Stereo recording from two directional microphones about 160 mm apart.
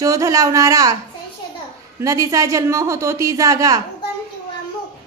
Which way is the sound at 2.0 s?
20° right (ahead or behind).